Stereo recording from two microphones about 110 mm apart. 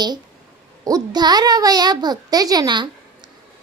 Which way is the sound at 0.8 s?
35° right (ahead or behind).